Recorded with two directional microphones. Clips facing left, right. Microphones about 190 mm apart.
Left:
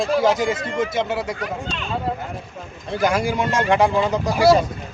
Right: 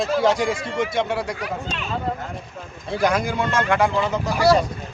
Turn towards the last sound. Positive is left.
turn(degrees=15)  # may be behind; listen again after turning